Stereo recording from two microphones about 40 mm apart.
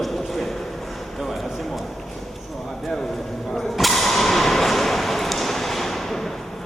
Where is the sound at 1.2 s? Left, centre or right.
Centre.